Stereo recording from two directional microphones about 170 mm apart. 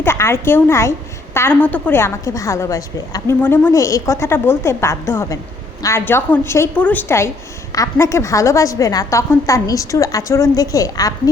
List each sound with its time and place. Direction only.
0.0 s a woman's voice: 15° left (ahead or behind)